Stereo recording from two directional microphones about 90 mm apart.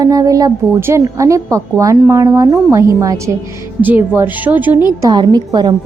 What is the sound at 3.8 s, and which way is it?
Speech, 20° right (ahead or behind).